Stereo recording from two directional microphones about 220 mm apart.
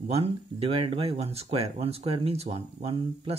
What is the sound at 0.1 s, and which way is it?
Speech, 25° right (ahead or behind).